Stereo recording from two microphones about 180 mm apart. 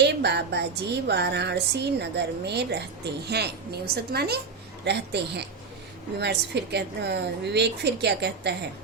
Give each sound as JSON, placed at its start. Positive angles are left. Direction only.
{"t": 0.0, "sound": "a woman's voice", "side_deg": -70}